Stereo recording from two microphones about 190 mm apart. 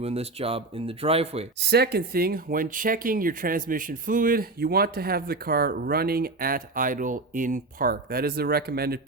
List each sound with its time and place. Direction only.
0.0 s speech: 30° right (ahead or behind)
1.5 s speech: 60° right (ahead or behind)